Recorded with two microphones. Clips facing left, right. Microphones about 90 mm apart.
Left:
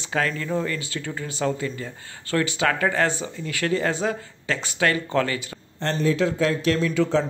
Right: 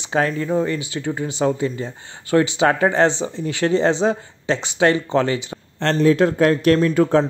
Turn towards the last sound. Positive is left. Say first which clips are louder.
# right 5 dB
turn(degrees=-50)  # may be behind; listen again after turning